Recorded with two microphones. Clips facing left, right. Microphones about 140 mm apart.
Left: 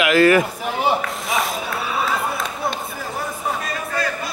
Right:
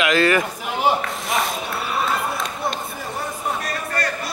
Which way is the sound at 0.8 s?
Centre (ahead or behind).